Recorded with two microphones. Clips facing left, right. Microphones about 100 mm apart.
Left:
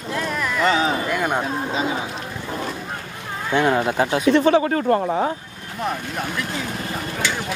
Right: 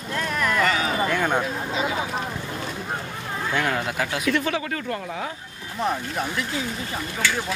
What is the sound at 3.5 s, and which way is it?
Speech, 20° left (ahead or behind).